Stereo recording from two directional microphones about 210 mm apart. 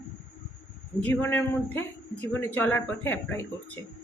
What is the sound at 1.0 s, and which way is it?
A woman's voice, 10° left (ahead or behind).